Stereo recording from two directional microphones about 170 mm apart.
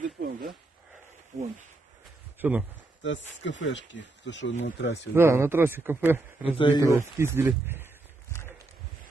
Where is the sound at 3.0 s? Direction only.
90° left.